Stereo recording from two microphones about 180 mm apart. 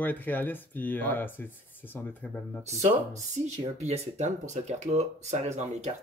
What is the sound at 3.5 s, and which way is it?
Speech, 35° right (ahead or behind).